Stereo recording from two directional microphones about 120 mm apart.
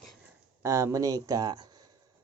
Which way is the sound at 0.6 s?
25° right (ahead or behind).